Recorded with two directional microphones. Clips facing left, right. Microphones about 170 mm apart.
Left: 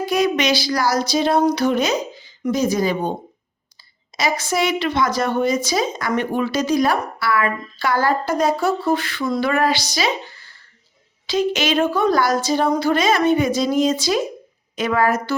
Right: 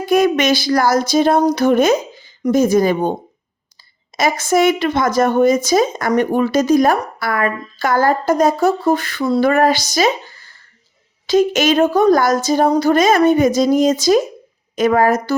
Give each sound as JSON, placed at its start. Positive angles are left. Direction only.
{"t": 0.0, "sound": "speech", "side_deg": -50}